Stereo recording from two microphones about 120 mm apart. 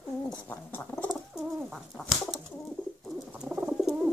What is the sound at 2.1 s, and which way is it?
Pigeon, centre (ahead or behind).